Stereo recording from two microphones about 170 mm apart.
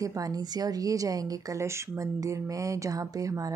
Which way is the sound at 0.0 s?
20° right (ahead or behind).